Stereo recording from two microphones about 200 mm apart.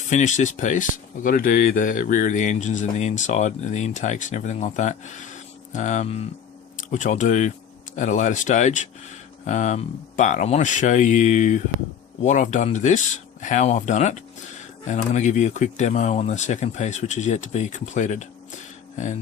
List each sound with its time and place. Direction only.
0.1 s speech: 35° left (ahead or behind)